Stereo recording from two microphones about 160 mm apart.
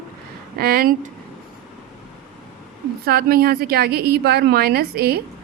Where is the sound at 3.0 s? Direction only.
70° right (ahead or behind).